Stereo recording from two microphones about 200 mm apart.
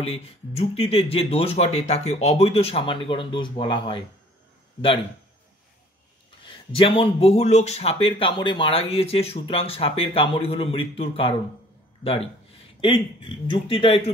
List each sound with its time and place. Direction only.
0.0 s speech: 30° left (ahead or behind)
6.4 s speech: 25° left (ahead or behind)